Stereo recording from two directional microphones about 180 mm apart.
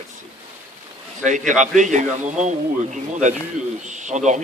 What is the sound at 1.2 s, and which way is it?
A man's voice, 45° right (ahead or behind).